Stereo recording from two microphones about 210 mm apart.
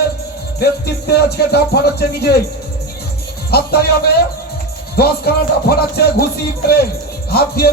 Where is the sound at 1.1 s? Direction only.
50° left (ahead or behind).